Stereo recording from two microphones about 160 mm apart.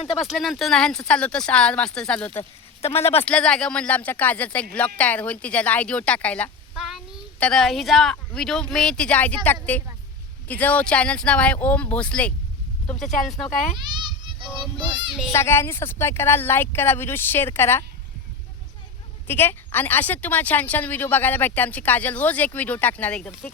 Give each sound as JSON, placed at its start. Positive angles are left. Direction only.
{"t": 0.3, "sound": "speech", "side_deg": 0}
{"t": 2.8, "sound": "speech", "side_deg": 40}
{"t": 3.2, "sound": "a woman's voice", "side_deg": 5}
{"t": 13.7, "sound": "children playing", "side_deg": -30}
{"t": 14.8, "sound": "a child's voice", "side_deg": -30}
{"t": 15.3, "sound": "speech", "side_deg": 15}
{"t": 19.3, "sound": "speech", "side_deg": 15}